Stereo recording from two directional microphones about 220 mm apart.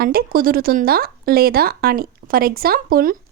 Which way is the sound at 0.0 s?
45° right (ahead or behind).